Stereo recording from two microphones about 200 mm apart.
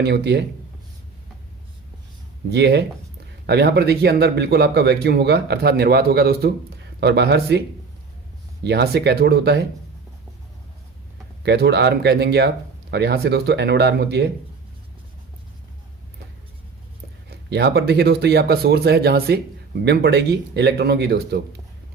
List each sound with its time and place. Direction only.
0.0 s speech: 55° right (ahead or behind)
2.5 s speech: 55° right (ahead or behind)
8.6 s speech: 55° right (ahead or behind)
11.4 s speech: 55° right (ahead or behind)
17.2 s speech: 55° right (ahead or behind)